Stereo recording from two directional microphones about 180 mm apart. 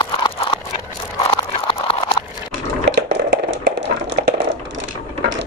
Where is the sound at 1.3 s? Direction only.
30° left (ahead or behind).